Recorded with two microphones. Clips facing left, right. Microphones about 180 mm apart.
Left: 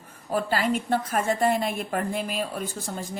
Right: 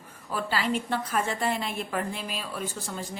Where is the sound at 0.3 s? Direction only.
45° left (ahead or behind).